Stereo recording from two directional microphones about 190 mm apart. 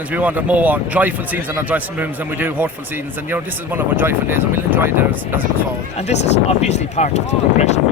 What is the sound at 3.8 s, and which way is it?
Speech, 10° right (ahead or behind).